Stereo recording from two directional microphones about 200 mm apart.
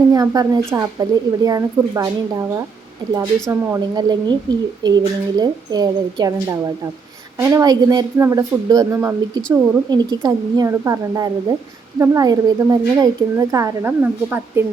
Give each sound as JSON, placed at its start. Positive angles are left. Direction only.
{"t": 0.1, "sound": "a woman's voice", "side_deg": -20}